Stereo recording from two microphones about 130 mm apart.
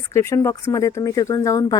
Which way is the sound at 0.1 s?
20° left (ahead or behind).